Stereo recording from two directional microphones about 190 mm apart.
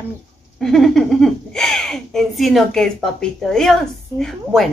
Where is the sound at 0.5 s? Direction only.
Centre (ahead or behind).